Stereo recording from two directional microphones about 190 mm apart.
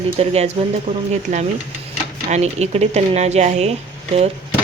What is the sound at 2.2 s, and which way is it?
Speech, 35° right (ahead or behind).